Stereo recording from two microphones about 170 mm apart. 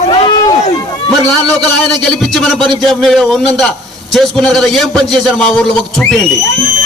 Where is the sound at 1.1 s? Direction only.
5° left (ahead or behind).